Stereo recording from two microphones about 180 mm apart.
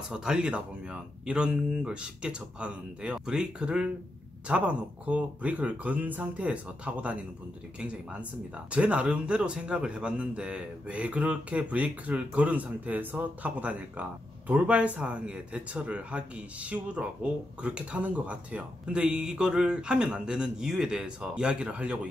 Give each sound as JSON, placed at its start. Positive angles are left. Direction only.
{"t": 0.1, "sound": "a man's voice", "side_deg": -5}